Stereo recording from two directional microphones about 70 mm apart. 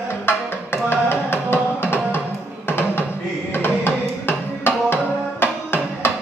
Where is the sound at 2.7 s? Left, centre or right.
Left.